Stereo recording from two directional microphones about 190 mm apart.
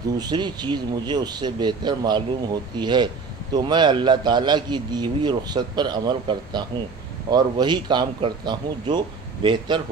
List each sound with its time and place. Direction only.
0.2 s a man's voice: 20° right (ahead or behind)